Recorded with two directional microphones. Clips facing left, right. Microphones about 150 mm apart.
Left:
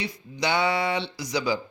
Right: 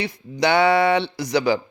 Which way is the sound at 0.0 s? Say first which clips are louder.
Right 7 dB; 60° right (ahead or behind).